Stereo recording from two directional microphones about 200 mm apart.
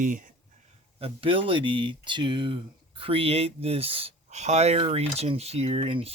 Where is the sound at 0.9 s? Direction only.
30° right (ahead or behind).